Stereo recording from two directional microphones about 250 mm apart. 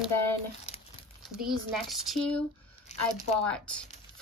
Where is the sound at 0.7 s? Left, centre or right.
Left.